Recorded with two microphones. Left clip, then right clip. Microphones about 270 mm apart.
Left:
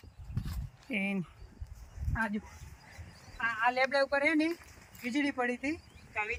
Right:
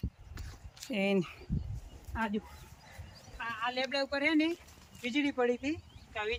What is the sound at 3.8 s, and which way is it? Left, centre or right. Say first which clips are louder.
Speech: left 1 dB; centre.